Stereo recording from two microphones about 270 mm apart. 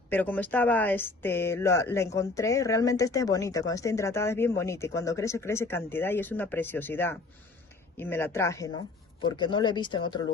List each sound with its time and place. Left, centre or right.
0.1 s speech: centre